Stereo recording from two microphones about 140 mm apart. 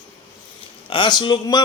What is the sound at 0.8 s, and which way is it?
Speech, 35° left (ahead or behind).